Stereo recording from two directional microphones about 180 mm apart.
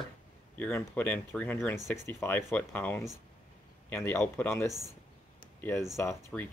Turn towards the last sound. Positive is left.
turn(degrees=15)  # may be behind; listen again after turning